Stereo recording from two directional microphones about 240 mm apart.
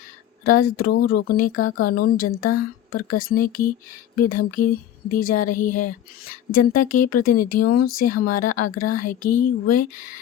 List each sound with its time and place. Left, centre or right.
0.4 s speech: left